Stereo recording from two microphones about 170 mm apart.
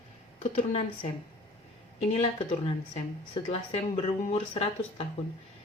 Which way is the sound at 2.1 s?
35° left (ahead or behind).